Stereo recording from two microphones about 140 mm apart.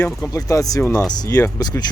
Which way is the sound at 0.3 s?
25° left (ahead or behind).